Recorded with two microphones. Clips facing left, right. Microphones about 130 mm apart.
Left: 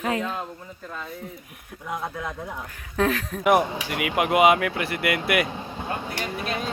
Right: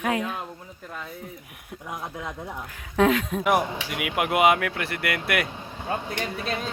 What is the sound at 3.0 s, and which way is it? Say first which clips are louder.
Speech: right 3 dB; 15° right (ahead or behind).